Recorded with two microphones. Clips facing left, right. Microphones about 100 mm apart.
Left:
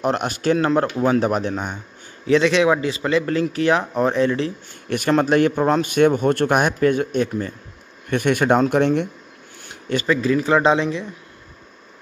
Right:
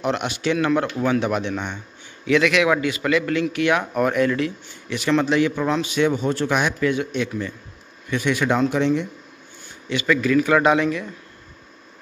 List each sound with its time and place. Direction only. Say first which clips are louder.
0.0 s a man's voice: left 2 dB; 45° left (ahead or behind)
4.8 s speech: left 2 dB; 50° left (ahead or behind)
9.8 s speech: left 1 dB; 40° left (ahead or behind)
10.1 s a man's voice: right 1 dB; 30° left (ahead or behind)